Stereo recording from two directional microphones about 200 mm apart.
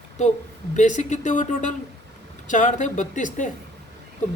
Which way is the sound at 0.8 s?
35° left (ahead or behind).